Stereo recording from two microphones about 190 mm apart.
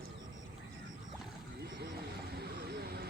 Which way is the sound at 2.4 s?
60° right (ahead or behind).